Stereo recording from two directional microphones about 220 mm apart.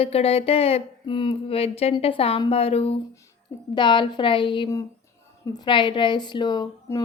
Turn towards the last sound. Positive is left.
turn(degrees=20)  # may be behind; listen again after turning